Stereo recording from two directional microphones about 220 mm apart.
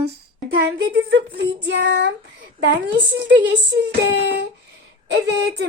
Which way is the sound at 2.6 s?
50° right (ahead or behind).